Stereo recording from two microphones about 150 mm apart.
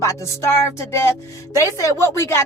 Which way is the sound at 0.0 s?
20° left (ahead or behind).